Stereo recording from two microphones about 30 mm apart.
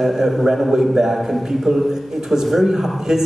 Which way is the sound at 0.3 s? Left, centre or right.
Centre.